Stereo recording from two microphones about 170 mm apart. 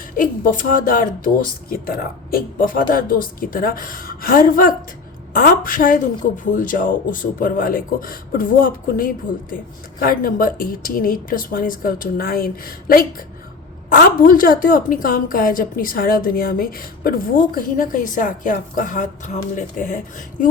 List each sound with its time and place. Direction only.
0.2 s a woman's voice: 55° left (ahead or behind)